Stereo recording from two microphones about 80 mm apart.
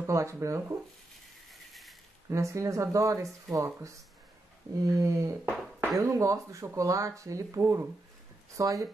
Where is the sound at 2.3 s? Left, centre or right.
Right.